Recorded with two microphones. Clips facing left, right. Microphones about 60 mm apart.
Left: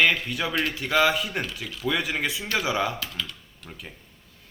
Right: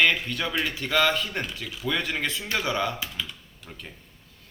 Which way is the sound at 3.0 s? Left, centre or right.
Centre.